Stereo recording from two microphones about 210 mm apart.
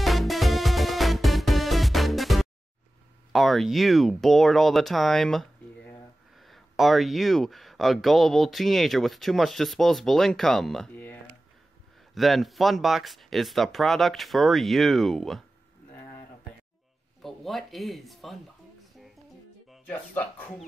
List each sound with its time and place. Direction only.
0.0 s music: centre (ahead or behind)
3.3 s speech: centre (ahead or behind)
17.2 s speech: centre (ahead or behind)
19.7 s speech: 5° left (ahead or behind)